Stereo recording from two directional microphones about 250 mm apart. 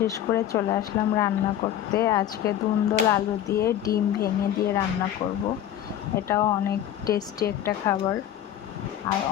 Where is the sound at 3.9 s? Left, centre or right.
Left.